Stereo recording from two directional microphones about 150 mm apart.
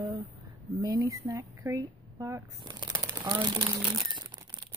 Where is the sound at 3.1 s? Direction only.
30° right (ahead or behind).